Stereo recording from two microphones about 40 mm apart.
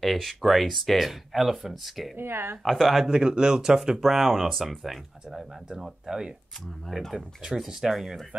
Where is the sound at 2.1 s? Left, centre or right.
Right.